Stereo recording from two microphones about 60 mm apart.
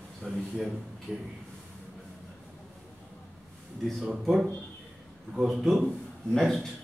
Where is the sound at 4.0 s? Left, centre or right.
Centre.